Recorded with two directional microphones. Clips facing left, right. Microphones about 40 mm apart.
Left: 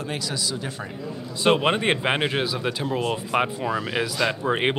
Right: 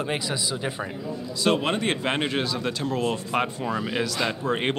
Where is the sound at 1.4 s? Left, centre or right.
Left.